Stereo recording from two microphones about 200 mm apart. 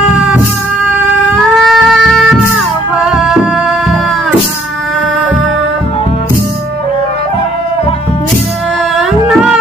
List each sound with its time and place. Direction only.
1.6 s a sound: centre (ahead or behind)
2.5 s music: centre (ahead or behind)
8.9 s music: centre (ahead or behind)